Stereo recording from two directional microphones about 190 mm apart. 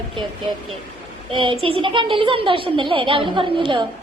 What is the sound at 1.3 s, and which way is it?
A woman's voice, 25° right (ahead or behind).